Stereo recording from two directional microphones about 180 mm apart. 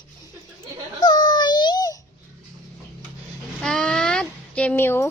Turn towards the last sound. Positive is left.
turn(degrees=15)  # may be behind; listen again after turning